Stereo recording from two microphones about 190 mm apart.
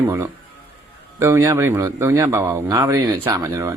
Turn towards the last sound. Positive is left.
turn(degrees=-15)  # may be behind; listen again after turning